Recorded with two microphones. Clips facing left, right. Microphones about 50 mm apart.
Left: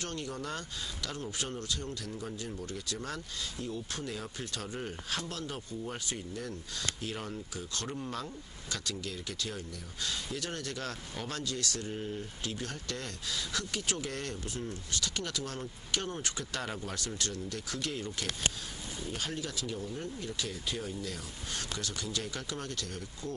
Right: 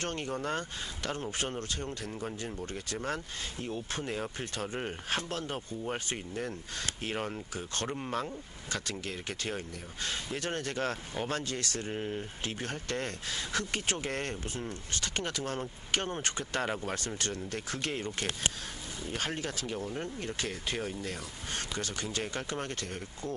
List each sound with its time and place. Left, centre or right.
0.0 s speech: right